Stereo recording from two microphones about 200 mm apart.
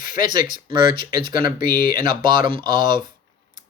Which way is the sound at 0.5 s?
25° right (ahead or behind).